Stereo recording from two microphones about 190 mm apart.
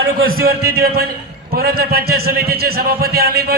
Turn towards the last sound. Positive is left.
turn(degrees=-55)  # may be behind; listen again after turning